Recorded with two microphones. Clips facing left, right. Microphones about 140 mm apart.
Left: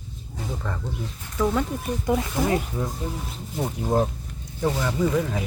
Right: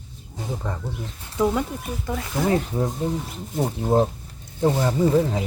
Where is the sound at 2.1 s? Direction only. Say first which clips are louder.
Left 6 dB; 15° left (ahead or behind).